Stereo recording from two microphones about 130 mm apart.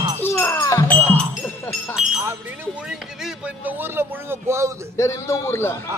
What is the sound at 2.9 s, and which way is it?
Speech, 10° right (ahead or behind).